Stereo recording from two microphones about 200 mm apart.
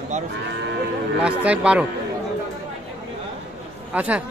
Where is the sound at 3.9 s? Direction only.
5° right (ahead or behind).